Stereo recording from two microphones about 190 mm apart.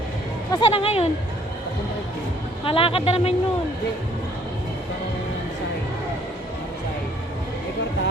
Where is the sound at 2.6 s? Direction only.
30° left (ahead or behind).